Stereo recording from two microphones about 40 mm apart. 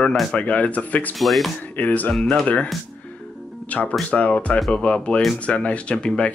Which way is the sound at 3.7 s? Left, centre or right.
Left.